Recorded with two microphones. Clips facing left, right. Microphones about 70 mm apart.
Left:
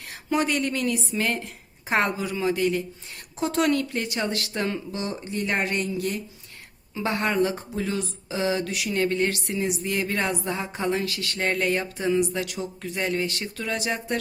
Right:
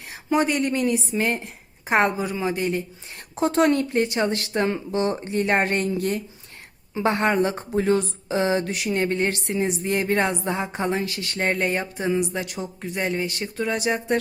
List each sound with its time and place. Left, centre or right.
0.1 s speech: centre
3.3 s speech: right